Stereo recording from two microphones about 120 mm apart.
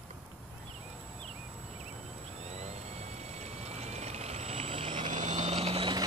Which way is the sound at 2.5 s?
65° right (ahead or behind).